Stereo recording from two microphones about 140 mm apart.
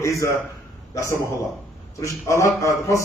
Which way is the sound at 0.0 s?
25° left (ahead or behind).